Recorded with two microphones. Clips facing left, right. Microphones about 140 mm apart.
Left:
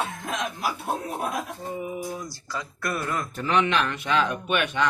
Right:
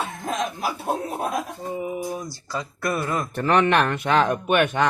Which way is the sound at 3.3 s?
55° right (ahead or behind).